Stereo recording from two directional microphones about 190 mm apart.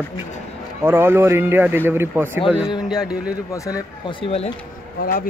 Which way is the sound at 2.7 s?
20° left (ahead or behind).